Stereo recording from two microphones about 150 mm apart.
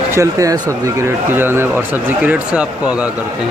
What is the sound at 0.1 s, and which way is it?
Speech, 20° right (ahead or behind).